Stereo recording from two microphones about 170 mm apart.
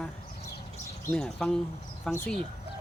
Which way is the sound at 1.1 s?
Centre (ahead or behind).